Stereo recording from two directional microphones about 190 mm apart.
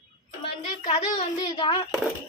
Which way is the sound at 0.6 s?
35° left (ahead or behind).